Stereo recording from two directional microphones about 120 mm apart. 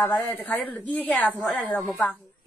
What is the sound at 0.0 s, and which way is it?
A woman's voice, 15° left (ahead or behind).